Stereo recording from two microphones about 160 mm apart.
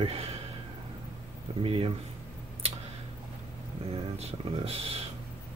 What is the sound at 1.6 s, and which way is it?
Speech, 35° right (ahead or behind).